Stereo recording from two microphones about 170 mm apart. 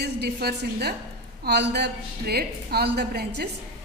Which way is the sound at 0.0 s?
75° right (ahead or behind).